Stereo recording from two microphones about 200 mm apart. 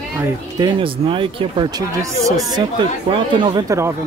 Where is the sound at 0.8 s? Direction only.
25° right (ahead or behind).